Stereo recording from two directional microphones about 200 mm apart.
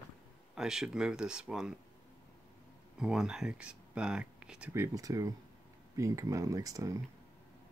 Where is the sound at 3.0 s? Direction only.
5° right (ahead or behind).